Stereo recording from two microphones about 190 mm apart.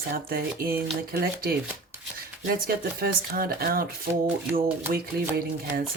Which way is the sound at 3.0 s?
50° right (ahead or behind).